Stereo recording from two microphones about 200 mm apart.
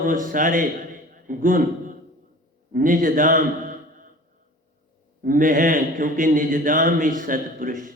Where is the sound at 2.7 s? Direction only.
45° right (ahead or behind).